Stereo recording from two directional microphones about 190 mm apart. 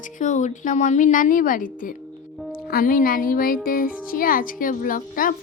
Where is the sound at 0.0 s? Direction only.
40° left (ahead or behind).